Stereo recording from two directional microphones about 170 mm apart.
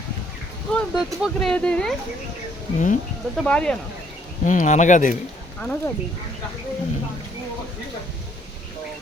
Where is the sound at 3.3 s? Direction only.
5° left (ahead or behind).